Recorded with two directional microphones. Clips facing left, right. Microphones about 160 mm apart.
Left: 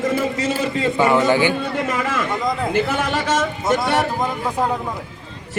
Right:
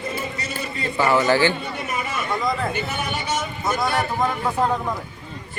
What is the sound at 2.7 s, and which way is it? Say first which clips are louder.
A man's voice: left 7 dB; 90° left.